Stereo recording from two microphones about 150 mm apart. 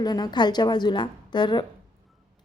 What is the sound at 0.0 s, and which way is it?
A woman's voice, 25° left (ahead or behind).